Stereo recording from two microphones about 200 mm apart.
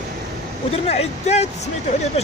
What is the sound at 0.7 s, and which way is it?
Speech, 30° left (ahead or behind).